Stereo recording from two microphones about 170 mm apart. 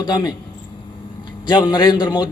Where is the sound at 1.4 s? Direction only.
25° left (ahead or behind).